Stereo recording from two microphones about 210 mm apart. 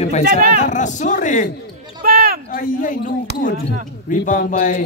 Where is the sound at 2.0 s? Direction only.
45° right (ahead or behind).